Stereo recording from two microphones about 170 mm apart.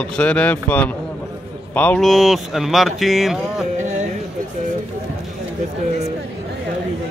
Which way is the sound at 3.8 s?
45° right (ahead or behind).